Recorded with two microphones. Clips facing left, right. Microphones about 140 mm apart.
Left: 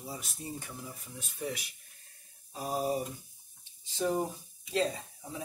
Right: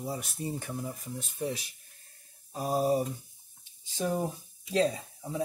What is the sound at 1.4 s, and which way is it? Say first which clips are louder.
Speech: right 3 dB; 30° right (ahead or behind).